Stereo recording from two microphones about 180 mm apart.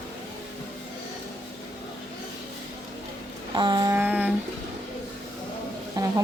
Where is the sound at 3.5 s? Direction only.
25° right (ahead or behind).